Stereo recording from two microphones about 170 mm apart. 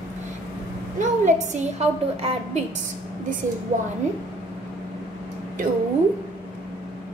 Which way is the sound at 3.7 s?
45° right (ahead or behind).